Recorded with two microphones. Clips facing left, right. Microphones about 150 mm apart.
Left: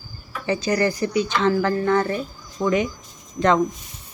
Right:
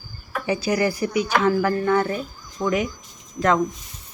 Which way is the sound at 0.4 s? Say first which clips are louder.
Left 1 dB; 10° right (ahead or behind).